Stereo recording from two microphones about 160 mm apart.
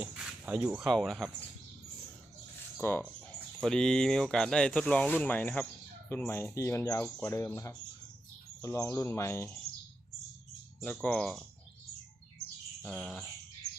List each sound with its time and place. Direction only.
0.0 s speech: 5° right (ahead or behind)
2.8 s speech: 15° left (ahead or behind)
10.8 s speech: 5° left (ahead or behind)
12.8 s speech: 5° left (ahead or behind)